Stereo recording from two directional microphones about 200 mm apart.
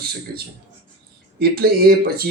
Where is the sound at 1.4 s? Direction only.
50° right (ahead or behind).